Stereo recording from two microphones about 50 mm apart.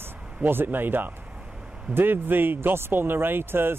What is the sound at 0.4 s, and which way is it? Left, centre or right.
Speech, right.